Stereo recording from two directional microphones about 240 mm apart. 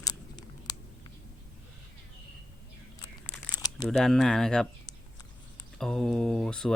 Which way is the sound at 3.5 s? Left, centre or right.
Centre.